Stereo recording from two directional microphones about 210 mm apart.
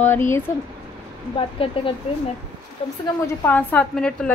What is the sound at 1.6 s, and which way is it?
Speech, 25° left (ahead or behind).